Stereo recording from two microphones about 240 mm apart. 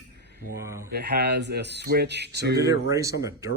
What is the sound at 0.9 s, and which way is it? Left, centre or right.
Speech, right.